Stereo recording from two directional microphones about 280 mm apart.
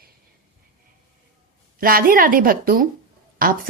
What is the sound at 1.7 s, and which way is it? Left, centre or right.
A woman's voice, right.